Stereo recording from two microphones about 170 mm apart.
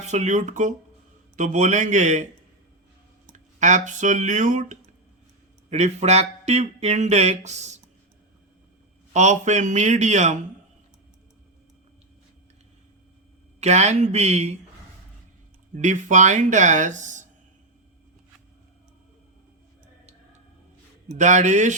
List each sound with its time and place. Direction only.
0.0 s speech: 45° right (ahead or behind)
3.3 s speech: 45° right (ahead or behind)
9.1 s speech: 45° right (ahead or behind)
13.6 s speech: 40° right (ahead or behind)
15.7 s speech: 45° right (ahead or behind)
21.1 s speech: 45° right (ahead or behind)